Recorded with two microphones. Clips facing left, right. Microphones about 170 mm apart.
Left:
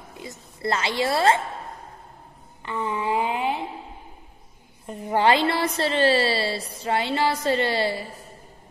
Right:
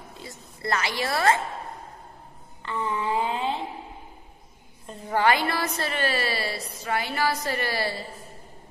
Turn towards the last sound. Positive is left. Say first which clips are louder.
# left 6 dB
turn(degrees=25)  # may be behind; listen again after turning